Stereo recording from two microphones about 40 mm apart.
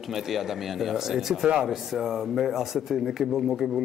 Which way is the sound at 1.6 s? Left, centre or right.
Centre.